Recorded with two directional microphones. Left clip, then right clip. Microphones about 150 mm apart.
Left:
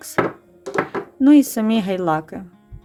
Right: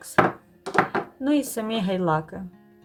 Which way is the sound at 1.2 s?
55° left (ahead or behind).